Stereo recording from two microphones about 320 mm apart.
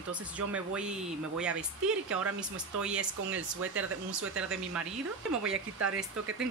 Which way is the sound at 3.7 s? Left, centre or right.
Right.